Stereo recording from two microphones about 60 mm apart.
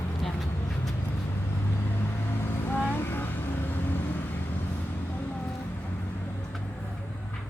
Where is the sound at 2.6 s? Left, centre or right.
Left.